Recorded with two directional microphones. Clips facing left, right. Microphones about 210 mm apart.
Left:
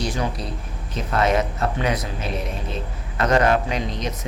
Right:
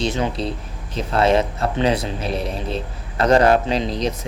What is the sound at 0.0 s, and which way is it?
Speech, 25° right (ahead or behind).